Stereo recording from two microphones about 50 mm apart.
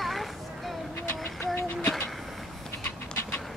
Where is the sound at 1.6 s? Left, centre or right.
Left.